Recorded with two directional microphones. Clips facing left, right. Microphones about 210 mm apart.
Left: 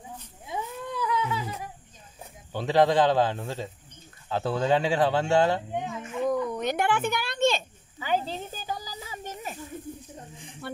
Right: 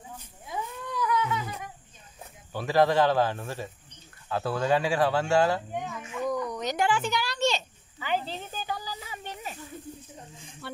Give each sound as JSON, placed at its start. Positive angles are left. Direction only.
{"t": 0.5, "sound": "cat", "side_deg": 25}
{"t": 2.5, "sound": "speech", "side_deg": 20}
{"t": 6.5, "sound": "a sound", "side_deg": 55}
{"t": 10.6, "sound": "music", "side_deg": 50}